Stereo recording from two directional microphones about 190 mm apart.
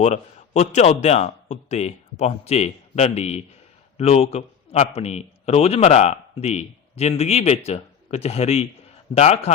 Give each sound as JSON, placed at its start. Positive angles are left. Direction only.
{"t": 0.0, "sound": "a man's voice", "side_deg": 35}